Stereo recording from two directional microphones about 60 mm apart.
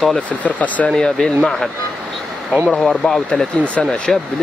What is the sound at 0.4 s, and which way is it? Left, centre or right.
Speech, left.